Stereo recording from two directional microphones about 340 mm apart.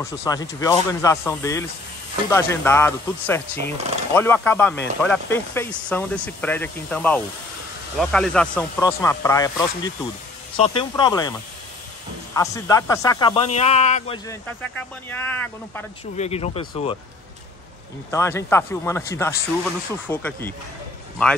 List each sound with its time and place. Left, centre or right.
0.0 s speech: centre
12.5 s speech: centre
16.2 s speech: centre
18.1 s speech: centre